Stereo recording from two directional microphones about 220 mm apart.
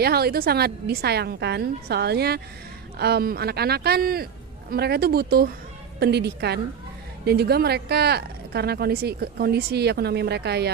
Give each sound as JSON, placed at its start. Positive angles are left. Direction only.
{"t": 0.0, "sound": "speech", "side_deg": -45}